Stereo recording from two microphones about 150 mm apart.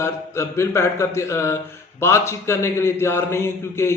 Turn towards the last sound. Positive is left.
turn(degrees=15)  # may be behind; listen again after turning